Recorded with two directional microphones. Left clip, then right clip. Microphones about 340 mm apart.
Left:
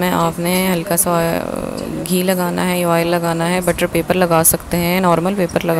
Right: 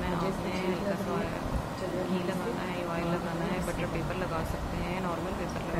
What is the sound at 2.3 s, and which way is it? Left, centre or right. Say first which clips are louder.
Speech: left 16 dB; left.